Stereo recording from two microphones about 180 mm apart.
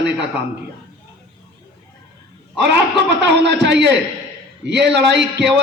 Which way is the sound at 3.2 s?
75° right (ahead or behind).